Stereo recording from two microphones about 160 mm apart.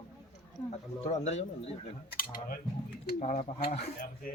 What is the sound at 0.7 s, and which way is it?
Speech, 45° left (ahead or behind).